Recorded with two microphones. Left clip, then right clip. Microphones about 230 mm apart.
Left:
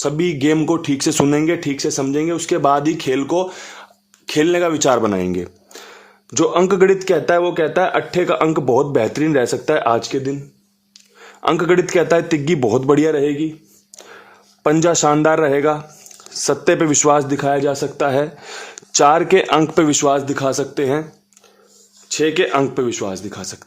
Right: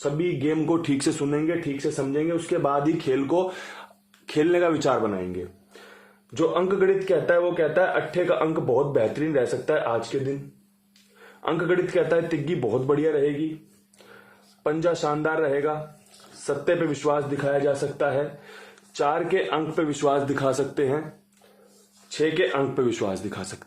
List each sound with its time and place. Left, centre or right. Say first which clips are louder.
0.0 s a man's voice: left 7 dB; left
0.7 s speech: left 6 dB; left
1.3 s speech: left 8 dB; left
5.0 s a man's voice: left 9 dB; left
14.6 s a man's voice: left 9 dB; left
20.0 s speech: left 6 dB; left
22.2 s a man's voice: left 7 dB; left
22.8 s speech: left 4 dB; left